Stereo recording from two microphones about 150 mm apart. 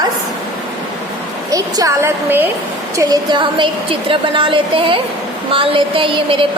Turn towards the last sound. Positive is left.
turn(degrees=-35)  # may be behind; listen again after turning